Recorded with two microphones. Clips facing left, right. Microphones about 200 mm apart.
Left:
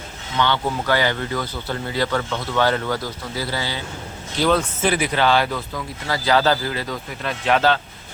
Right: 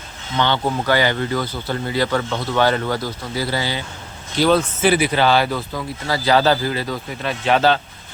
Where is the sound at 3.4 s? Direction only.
15° right (ahead or behind).